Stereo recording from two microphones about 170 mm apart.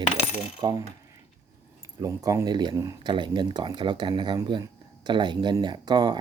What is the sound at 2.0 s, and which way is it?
Speech, 20° right (ahead or behind).